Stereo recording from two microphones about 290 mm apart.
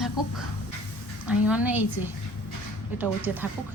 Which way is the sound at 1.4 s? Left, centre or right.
Centre.